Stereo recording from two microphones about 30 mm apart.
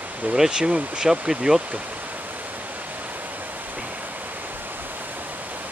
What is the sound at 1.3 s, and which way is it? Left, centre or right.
Speech, right.